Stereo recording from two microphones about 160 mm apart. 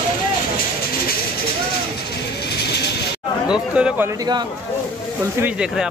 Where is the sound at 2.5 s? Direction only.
90° left.